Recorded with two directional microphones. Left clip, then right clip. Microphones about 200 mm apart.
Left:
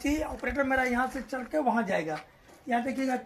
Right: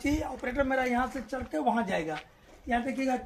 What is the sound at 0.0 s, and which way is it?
Speech, 20° left (ahead or behind).